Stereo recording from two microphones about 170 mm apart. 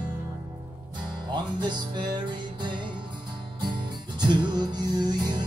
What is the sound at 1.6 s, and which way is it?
Music, 25° right (ahead or behind).